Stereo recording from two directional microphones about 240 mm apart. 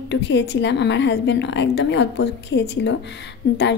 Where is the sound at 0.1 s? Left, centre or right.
Left.